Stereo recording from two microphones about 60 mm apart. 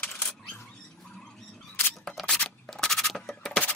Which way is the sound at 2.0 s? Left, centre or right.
Centre.